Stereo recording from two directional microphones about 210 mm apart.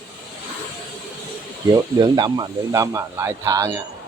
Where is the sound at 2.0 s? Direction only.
20° right (ahead or behind).